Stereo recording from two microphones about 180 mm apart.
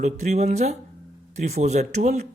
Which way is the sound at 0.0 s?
40° right (ahead or behind).